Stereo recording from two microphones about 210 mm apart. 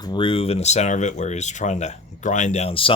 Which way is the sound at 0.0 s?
20° left (ahead or behind).